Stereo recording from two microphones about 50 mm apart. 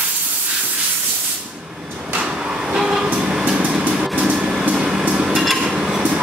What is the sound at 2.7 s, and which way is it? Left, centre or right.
Train, centre.